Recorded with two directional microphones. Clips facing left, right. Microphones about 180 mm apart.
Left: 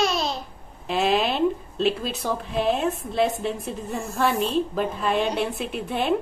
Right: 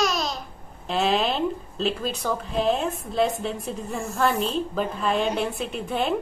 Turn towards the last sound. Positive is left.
turn(degrees=0)  # may be behind; listen again after turning